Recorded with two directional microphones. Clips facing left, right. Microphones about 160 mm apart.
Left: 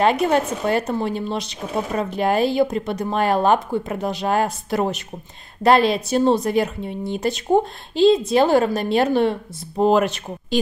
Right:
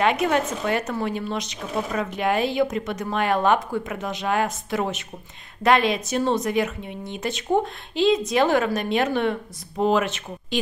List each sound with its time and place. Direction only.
0.0 s speech: 35° left (ahead or behind)